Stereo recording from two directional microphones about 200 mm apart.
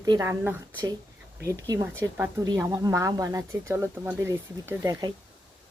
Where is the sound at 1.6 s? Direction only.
15° right (ahead or behind).